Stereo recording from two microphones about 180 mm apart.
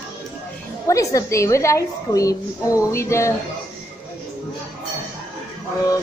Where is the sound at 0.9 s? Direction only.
20° left (ahead or behind).